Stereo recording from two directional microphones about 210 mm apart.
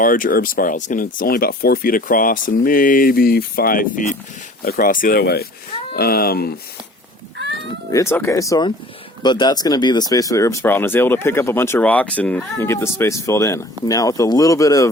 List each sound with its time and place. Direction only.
0.0 s speech: 40° left (ahead or behind)
7.3 s a sound: 55° right (ahead or behind)
7.9 s speech: 15° left (ahead or behind)